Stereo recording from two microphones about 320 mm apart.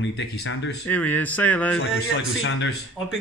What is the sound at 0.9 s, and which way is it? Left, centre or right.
Speech, centre.